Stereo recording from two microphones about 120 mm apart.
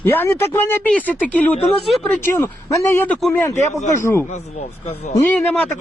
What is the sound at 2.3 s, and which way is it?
Speech, 25° left (ahead or behind).